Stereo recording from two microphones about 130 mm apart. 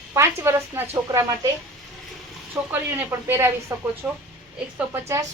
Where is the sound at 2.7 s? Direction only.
15° right (ahead or behind).